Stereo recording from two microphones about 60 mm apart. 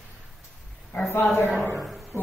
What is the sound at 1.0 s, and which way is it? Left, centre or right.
Speech, left.